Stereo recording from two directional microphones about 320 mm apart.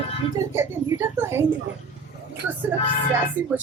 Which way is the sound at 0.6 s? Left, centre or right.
Centre.